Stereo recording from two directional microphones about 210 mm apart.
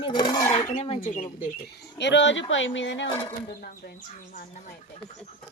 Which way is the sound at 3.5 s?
45° left (ahead or behind).